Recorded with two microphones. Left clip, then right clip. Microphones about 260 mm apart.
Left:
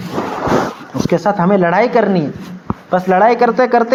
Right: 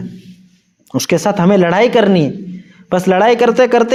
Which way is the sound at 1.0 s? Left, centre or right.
Right.